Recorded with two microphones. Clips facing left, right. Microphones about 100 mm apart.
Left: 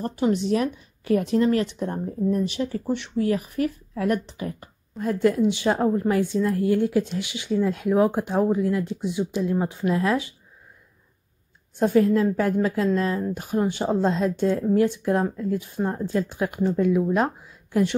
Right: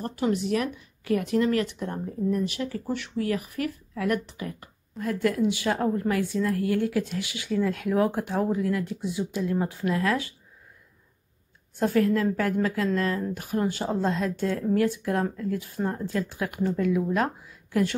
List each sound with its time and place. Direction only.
0.0 s speech: 25° left (ahead or behind)
11.7 s speech: 25° left (ahead or behind)